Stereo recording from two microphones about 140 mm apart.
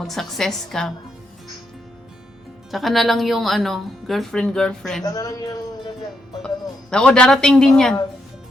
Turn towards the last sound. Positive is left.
turn(degrees=5)  # may be behind; listen again after turning